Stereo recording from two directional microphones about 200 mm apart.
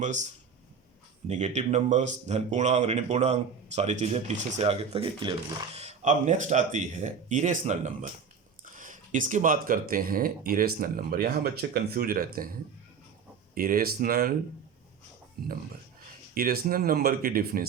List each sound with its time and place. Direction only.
0.0 s speech: 35° right (ahead or behind)
1.3 s speech: 35° right (ahead or behind)
16.3 s speech: 50° right (ahead or behind)